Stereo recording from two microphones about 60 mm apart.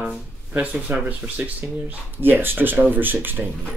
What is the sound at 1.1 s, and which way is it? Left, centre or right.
Speech, right.